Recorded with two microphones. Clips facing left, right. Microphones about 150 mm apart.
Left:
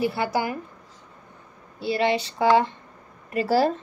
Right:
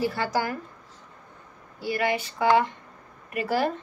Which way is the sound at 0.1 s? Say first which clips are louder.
Left 2 dB; 15° left (ahead or behind).